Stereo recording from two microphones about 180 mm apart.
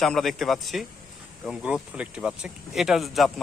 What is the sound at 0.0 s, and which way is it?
Speech, centre (ahead or behind).